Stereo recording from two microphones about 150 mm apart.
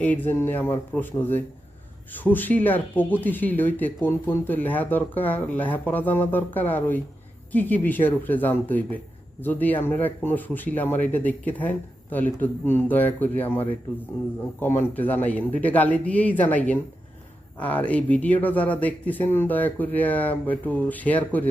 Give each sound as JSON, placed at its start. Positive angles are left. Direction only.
{"t": 0.0, "sound": "speech", "side_deg": 10}